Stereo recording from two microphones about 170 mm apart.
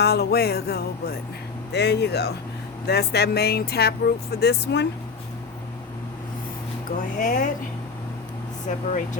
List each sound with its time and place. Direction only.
0.0 s speech: 70° left (ahead or behind)
1.7 s speech: 80° left
7.2 s speech: 50° left (ahead or behind)